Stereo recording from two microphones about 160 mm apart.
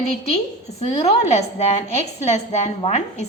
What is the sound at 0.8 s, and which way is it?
A woman's voice, 40° left (ahead or behind).